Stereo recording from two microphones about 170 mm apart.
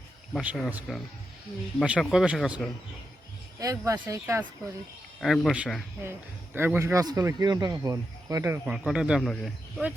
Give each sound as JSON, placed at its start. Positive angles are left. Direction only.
{"t": 0.4, "sound": "a man's voice", "side_deg": -5}
{"t": 3.6, "sound": "a man's voice", "side_deg": -20}
{"t": 5.2, "sound": "speech", "side_deg": 0}
{"t": 6.0, "sound": "a man's voice", "side_deg": -15}